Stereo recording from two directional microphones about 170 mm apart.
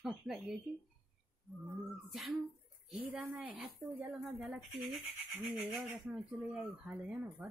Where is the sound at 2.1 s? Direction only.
Centre (ahead or behind).